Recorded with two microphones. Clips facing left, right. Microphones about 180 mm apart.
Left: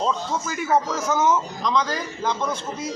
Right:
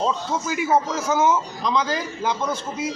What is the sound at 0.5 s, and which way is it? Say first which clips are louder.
A man's voice: right 1 dB; 10° right (ahead or behind).